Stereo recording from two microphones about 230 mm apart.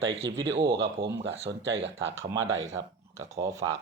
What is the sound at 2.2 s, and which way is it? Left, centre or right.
Speech, centre.